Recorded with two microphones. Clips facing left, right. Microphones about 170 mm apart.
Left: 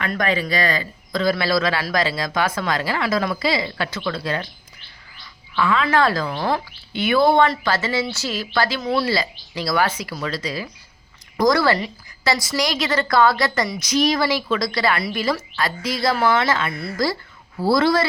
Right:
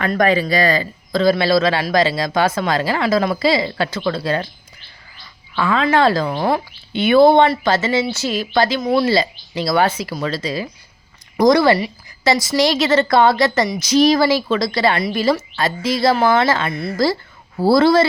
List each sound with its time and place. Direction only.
0.0 s a man's voice: 40° right (ahead or behind)
5.2 s bird: 35° right (ahead or behind)
5.9 s a man's voice: 25° right (ahead or behind)